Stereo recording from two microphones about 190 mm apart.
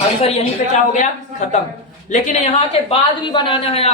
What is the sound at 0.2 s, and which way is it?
Speech, 30° left (ahead or behind).